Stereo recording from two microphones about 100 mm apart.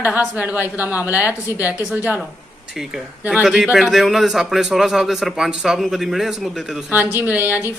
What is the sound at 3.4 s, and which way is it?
A man's voice, 5° right (ahead or behind).